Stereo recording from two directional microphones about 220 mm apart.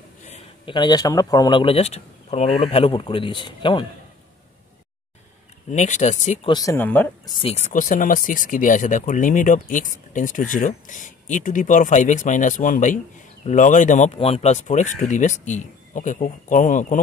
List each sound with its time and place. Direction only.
0.2 s a man's voice: 25° left (ahead or behind)
5.7 s speech: 35° left (ahead or behind)
6.5 s speech: 15° left (ahead or behind)
7.4 s speech: 30° left (ahead or behind)